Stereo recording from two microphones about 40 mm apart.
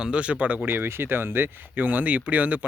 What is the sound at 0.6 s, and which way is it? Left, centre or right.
Speech, right.